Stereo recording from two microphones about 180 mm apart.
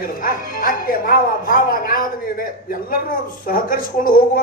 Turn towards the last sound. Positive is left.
turn(degrees=50)  # may be behind; listen again after turning